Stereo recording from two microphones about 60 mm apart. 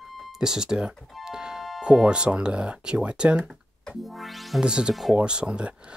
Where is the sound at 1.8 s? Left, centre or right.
Centre.